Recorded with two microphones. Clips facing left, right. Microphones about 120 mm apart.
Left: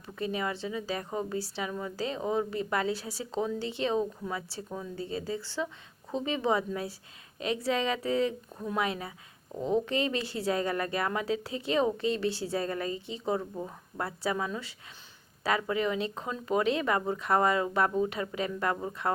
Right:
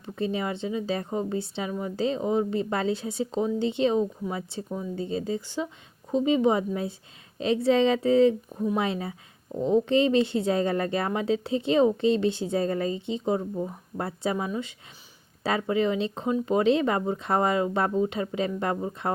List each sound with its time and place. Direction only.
0.0 s speech: 25° right (ahead or behind)